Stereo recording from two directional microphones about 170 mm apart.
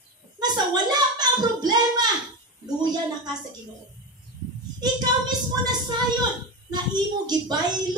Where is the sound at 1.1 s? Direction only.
25° right (ahead or behind).